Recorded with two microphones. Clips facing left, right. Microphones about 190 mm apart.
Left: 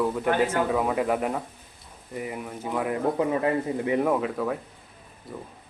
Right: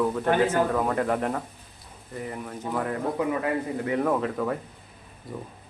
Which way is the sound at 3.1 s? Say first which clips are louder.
Left 2 dB; 25° left (ahead or behind).